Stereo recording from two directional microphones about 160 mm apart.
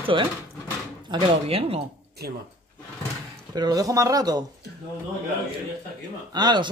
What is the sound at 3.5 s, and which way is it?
Speech, 25° right (ahead or behind).